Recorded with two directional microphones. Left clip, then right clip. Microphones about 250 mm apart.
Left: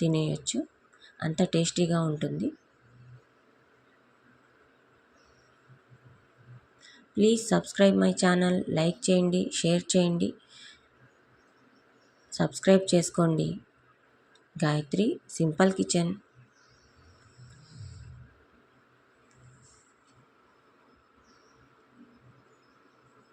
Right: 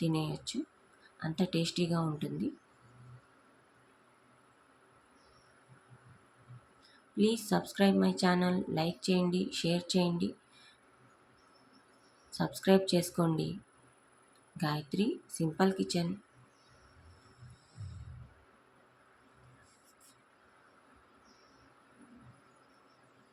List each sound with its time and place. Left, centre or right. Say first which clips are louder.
0.0 s speech: left 6 dB; centre
7.2 s speech: left 7 dB; centre
12.3 s speech: left 5 dB; centre
14.6 s speech: left 7 dB; centre